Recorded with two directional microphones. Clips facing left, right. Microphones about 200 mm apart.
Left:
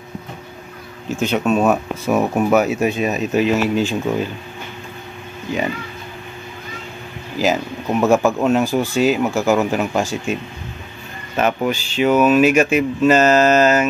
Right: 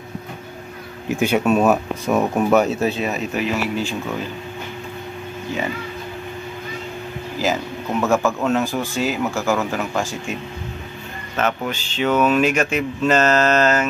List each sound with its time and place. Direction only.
1.0 s speech: 15° right (ahead or behind); by 3.9 s 20° left (ahead or behind)
5.5 s speech: 15° left (ahead or behind)
7.4 s speech: 15° left (ahead or behind)
11.3 s speech: 10° left (ahead or behind)